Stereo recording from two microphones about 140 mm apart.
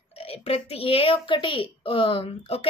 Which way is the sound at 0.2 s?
45° left (ahead or behind).